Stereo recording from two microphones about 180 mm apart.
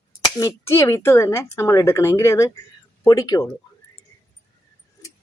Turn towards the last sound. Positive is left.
turn(degrees=20)  # may be behind; listen again after turning